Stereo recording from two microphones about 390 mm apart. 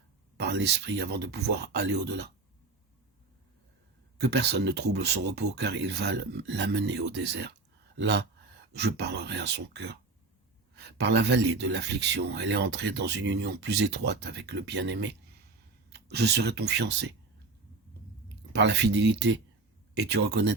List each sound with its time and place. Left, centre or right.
0.3 s speech: right
4.2 s speech: right
18.5 s speech: right